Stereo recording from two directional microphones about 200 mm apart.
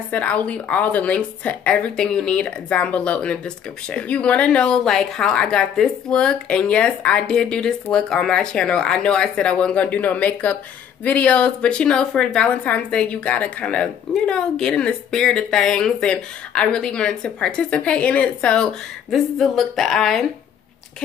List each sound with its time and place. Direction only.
0.1 s a woman's voice: 5° left (ahead or behind)